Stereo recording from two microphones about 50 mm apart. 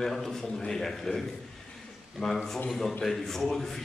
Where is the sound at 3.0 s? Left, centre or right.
Centre.